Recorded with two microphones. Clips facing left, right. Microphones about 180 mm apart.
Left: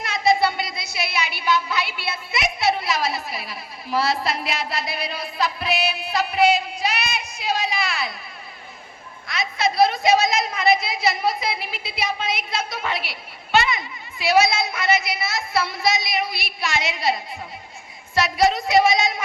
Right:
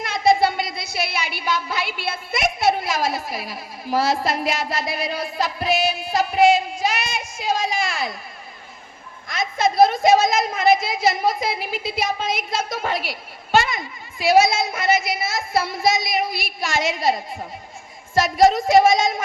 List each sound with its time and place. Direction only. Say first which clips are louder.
0.0 s speech: right 2 dB; 50° right (ahead or behind)
9.2 s a woman's voice: right 2 dB; 45° right (ahead or behind)